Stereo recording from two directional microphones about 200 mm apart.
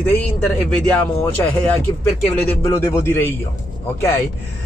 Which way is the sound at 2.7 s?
15° left (ahead or behind).